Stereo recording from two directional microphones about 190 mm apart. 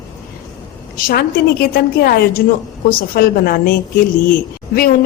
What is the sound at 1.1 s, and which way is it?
A woman's voice, 50° left (ahead or behind).